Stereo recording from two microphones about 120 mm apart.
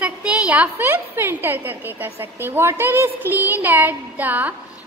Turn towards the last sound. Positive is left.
turn(degrees=-15)  # may be behind; listen again after turning